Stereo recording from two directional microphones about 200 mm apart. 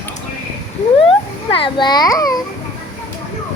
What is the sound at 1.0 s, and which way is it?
A child's voice, 25° left (ahead or behind).